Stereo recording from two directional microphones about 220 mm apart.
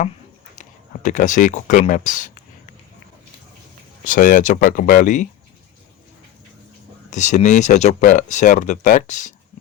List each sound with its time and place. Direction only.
0.6 s speech: 35° left (ahead or behind)
4.0 s speech: 35° left (ahead or behind)
7.1 s speech: 35° left (ahead or behind)